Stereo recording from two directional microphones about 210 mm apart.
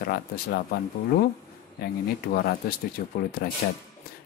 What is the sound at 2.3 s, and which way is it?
Speech, 45° left (ahead or behind).